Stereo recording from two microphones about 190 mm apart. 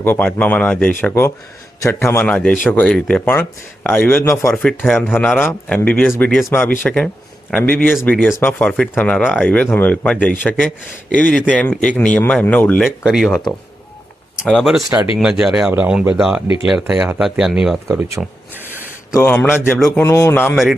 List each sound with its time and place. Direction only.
0.0 s speech: 10° left (ahead or behind)
14.4 s speech: centre (ahead or behind)
17.8 s speech: 15° right (ahead or behind)
18.2 s a sound: 10° right (ahead or behind)
19.1 s speech: 10° left (ahead or behind)